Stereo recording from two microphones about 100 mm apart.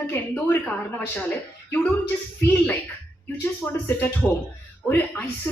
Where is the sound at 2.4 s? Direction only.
20° left (ahead or behind).